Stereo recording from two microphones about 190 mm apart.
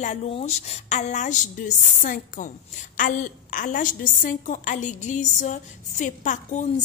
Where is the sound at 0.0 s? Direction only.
40° left (ahead or behind).